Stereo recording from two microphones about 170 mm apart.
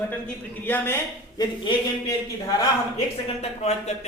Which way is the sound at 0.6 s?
15° left (ahead or behind).